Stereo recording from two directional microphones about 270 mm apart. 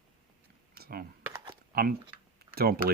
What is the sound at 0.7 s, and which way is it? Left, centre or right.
Speech, right.